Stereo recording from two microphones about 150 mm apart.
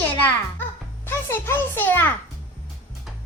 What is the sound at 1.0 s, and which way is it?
A child's voice, 15° left (ahead or behind).